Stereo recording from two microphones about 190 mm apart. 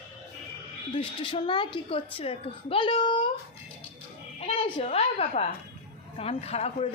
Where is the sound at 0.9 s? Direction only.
25° left (ahead or behind).